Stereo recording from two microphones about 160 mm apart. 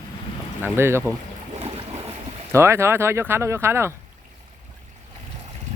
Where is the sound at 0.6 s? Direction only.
15° right (ahead or behind).